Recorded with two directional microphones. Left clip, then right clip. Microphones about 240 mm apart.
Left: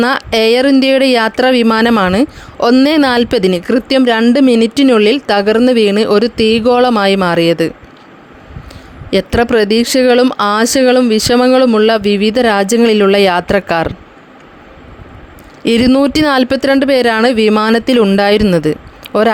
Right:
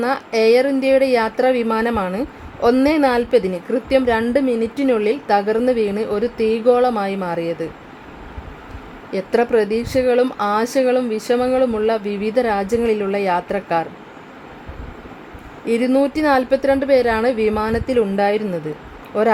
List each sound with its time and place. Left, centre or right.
0.0 s speech: left
9.0 s speech: left
15.6 s speech: left